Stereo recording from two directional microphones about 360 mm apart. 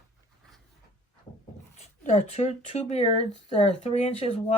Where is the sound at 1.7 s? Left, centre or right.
Centre.